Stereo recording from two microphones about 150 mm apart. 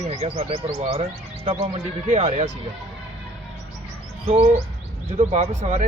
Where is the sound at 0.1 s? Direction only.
40° right (ahead or behind).